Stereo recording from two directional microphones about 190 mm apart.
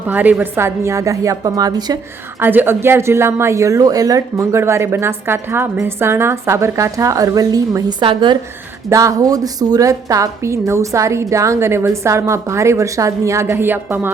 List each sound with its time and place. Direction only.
0.1 s a woman's voice: 10° right (ahead or behind)